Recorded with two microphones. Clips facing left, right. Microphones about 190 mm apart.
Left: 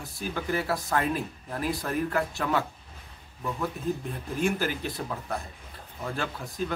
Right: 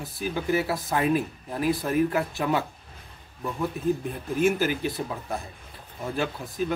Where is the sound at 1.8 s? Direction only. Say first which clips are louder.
Right 4 dB; 15° right (ahead or behind).